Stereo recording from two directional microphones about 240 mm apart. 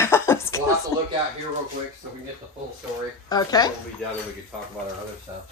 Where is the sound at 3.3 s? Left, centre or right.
Centre.